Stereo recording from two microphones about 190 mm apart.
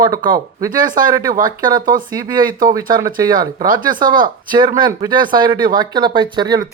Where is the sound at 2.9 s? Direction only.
20° right (ahead or behind).